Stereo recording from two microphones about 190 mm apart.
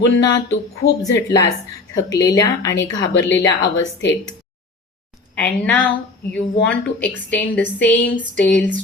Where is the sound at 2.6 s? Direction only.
70° left (ahead or behind).